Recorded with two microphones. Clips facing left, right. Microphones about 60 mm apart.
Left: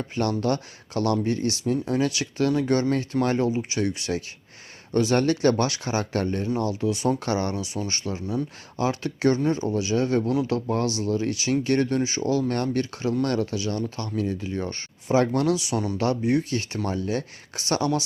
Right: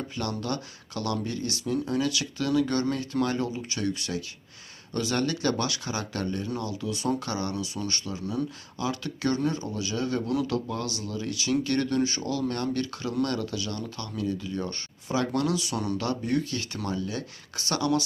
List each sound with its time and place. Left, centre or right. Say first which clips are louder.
0.2 s speech: left 8 dB; left
15.7 s speech: left 4 dB; centre
16.2 s speech: left 4 dB; left